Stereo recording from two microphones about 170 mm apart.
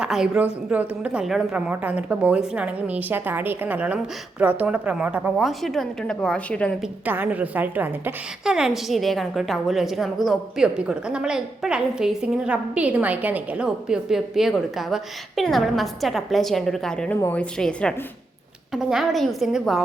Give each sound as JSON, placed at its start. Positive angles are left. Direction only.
{"t": 0.0, "sound": "a woman's voice", "side_deg": -5}
{"t": 7.0, "sound": "a woman's voice", "side_deg": -10}